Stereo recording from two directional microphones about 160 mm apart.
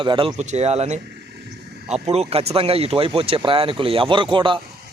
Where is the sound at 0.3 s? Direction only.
45° right (ahead or behind).